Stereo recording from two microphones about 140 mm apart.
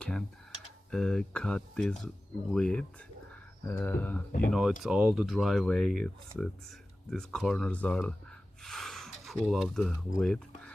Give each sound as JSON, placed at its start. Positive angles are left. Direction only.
{"t": 0.0, "sound": "speech", "side_deg": 5}
{"t": 4.3, "sound": "speech", "side_deg": 70}
{"t": 4.8, "sound": "speech", "side_deg": -5}